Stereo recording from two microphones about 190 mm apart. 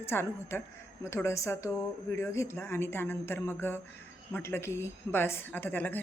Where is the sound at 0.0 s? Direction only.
10° left (ahead or behind).